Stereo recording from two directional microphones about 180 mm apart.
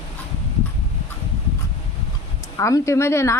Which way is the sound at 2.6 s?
15° left (ahead or behind).